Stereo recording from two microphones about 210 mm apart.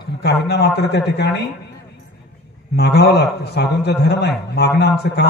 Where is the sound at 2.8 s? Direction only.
55° left (ahead or behind).